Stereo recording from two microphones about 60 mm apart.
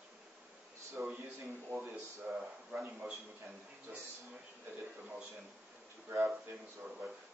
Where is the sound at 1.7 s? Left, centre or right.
Right.